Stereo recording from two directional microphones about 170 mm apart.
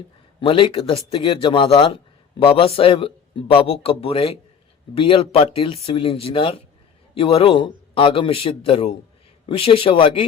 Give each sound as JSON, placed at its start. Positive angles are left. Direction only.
{"t": 0.3, "sound": "a man's voice", "side_deg": 30}